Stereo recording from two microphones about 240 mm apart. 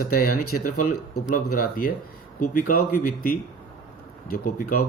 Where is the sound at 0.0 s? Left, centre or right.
Left.